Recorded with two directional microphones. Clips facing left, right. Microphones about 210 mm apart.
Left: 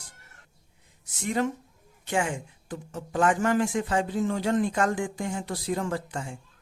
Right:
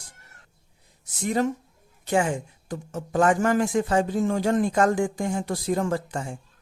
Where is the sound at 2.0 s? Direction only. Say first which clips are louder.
Right 5 dB; 40° right (ahead or behind).